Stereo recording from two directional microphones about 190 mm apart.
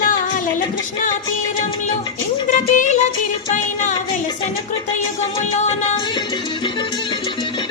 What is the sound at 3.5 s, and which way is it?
Music, 40° left (ahead or behind).